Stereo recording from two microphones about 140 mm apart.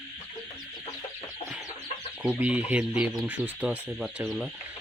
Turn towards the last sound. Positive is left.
turn(degrees=-5)  # may be behind; listen again after turning